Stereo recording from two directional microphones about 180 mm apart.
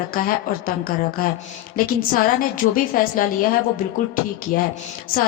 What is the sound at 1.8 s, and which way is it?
A woman's voice, 50° left (ahead or behind).